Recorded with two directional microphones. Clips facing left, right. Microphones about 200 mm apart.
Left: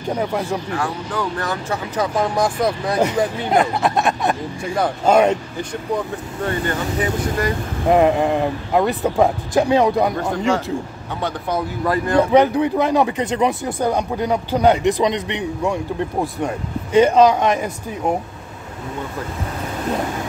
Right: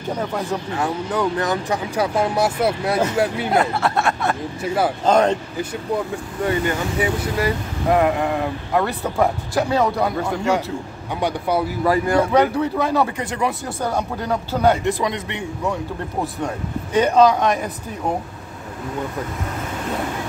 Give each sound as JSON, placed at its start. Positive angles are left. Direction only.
{"t": 0.7, "sound": "speech", "side_deg": -20}
{"t": 3.4, "sound": "speech", "side_deg": 20}
{"t": 6.4, "sound": "speech", "side_deg": -10}
{"t": 7.9, "sound": "speech", "side_deg": 20}
{"t": 11.1, "sound": "speech", "side_deg": -10}
{"t": 12.3, "sound": "speech", "side_deg": 15}